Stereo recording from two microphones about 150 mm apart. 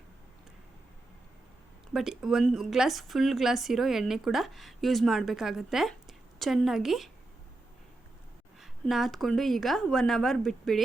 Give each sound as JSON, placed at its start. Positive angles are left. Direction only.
{"t": 1.9, "sound": "speech", "side_deg": -5}
{"t": 8.6, "sound": "speech", "side_deg": 0}